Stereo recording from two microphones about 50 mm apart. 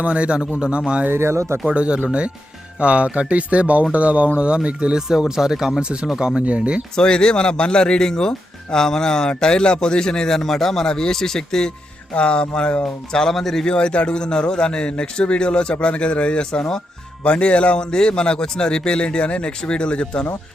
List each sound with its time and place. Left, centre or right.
0.0 s speech: right
1.1 s speech: right
1.6 s speech: right; by 5.8 s centre
5.8 s speech: centre
6.9 s speech: centre
13.7 s a man's voice: left
17.2 s a man's voice: left